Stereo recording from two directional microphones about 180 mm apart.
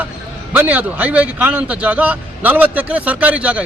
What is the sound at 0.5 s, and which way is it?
A man's voice, 10° right (ahead or behind).